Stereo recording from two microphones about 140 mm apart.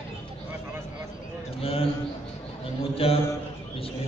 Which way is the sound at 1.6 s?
45° left (ahead or behind).